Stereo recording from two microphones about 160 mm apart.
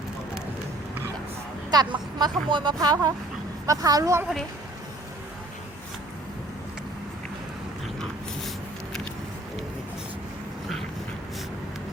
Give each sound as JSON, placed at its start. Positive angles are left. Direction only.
{"t": 1.7, "sound": "speech", "side_deg": -25}